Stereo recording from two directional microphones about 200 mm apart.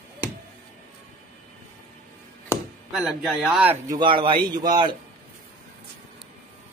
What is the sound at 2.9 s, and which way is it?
Speech, centre (ahead or behind).